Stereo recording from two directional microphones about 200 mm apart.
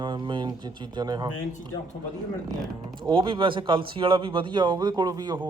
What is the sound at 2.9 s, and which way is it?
A man's voice, 25° right (ahead or behind).